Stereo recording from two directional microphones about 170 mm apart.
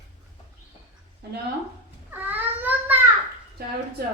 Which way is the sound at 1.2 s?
70° right (ahead or behind).